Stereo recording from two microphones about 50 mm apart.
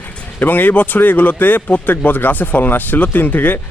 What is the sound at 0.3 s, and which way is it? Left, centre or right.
Speech, left.